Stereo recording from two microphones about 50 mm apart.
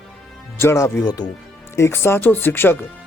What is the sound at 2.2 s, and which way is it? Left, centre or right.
Speech, left.